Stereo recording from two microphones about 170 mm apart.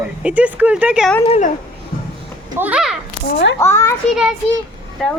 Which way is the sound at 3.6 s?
15° left (ahead or behind).